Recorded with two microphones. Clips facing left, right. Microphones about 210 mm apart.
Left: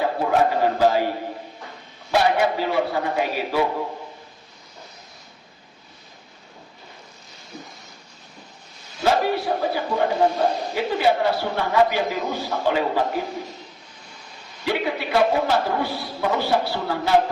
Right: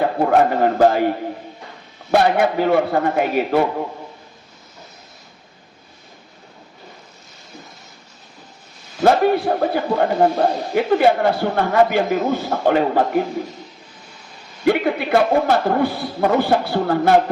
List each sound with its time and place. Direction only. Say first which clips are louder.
0.0 s a man's voice: right 4 dB; 55° right (ahead or behind)
9.0 s a man's voice: right 6 dB; 55° right (ahead or behind)
14.6 s a man's voice: right 7 dB; 55° right (ahead or behind)